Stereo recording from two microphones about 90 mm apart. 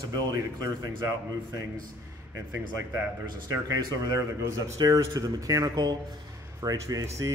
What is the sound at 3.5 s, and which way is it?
A man's voice, 40° right (ahead or behind).